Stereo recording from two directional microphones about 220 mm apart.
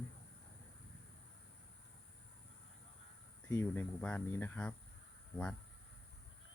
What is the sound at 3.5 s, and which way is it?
Speech, 10° left (ahead or behind).